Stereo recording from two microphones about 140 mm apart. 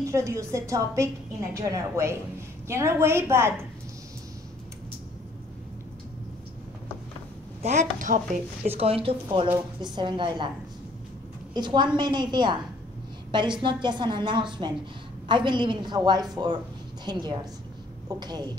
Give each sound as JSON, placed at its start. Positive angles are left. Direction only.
{"t": 0.0, "sound": "a woman's voice", "side_deg": -20}
{"t": 7.6, "sound": "a woman's voice", "side_deg": -60}
{"t": 8.6, "sound": "a woman's voice", "side_deg": -45}
{"t": 11.5, "sound": "a woman's voice", "side_deg": -30}